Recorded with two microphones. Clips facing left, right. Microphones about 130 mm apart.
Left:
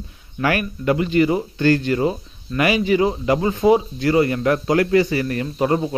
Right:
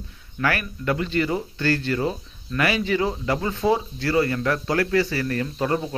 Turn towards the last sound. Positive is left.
turn(degrees=15)  # may be behind; listen again after turning